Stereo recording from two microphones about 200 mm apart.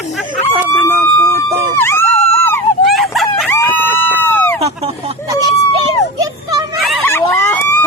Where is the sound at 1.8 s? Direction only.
10° left (ahead or behind).